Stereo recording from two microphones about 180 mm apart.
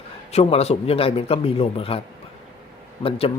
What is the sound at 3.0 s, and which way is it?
Speech, 35° left (ahead or behind).